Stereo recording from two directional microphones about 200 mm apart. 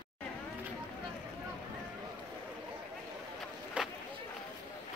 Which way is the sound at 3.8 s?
5° right (ahead or behind).